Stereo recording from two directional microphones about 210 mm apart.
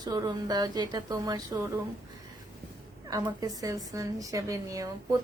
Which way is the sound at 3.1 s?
15° right (ahead or behind).